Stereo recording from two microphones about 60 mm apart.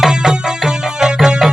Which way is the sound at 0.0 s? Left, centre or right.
Centre.